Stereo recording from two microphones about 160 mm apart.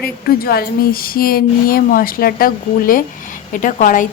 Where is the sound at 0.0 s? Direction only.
70° left (ahead or behind).